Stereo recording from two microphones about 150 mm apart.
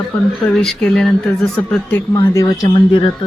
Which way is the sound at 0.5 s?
Centre (ahead or behind).